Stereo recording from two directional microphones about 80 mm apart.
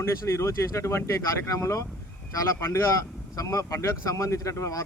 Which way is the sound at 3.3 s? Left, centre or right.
Left.